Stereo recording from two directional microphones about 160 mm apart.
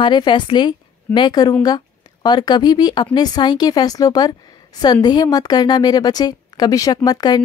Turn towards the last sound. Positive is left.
turn(degrees=25)  # may be behind; listen again after turning